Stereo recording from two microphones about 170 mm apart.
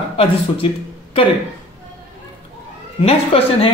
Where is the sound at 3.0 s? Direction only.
35° left (ahead or behind).